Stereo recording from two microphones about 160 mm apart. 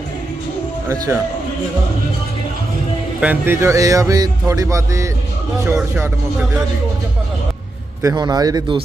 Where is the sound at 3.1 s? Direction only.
10° right (ahead or behind).